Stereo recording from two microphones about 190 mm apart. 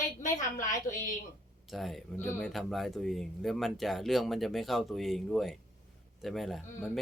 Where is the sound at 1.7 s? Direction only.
Centre (ahead or behind).